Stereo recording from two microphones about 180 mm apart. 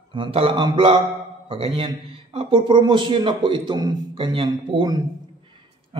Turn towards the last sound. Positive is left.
turn(degrees=-25)  # may be behind; listen again after turning